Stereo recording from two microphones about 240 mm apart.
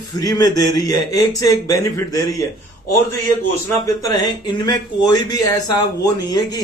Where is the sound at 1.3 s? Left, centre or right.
Left.